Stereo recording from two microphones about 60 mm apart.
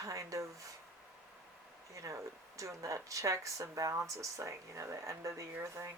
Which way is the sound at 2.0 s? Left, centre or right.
Right.